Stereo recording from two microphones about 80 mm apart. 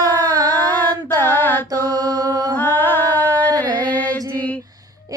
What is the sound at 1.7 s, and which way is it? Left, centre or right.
Mantra, right.